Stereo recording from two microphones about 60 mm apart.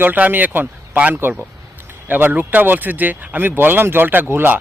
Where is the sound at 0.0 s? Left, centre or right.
Right.